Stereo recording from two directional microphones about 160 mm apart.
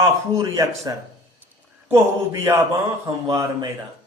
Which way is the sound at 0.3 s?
20° right (ahead or behind).